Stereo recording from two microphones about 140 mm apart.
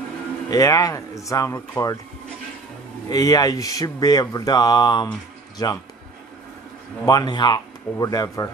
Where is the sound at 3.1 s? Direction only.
25° left (ahead or behind).